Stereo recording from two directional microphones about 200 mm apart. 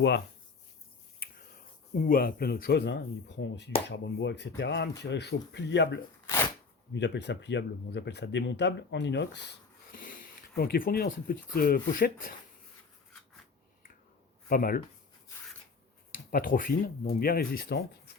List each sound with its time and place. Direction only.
2.0 s speech: 45° left (ahead or behind); by 6.0 s 60° left (ahead or behind)
6.2 s a sound: 10° left (ahead or behind)
6.9 s speech: 60° left (ahead or behind); by 12.3 s 45° left (ahead or behind)
14.5 s speech: 45° left (ahead or behind)
16.1 s speech: 45° left (ahead or behind)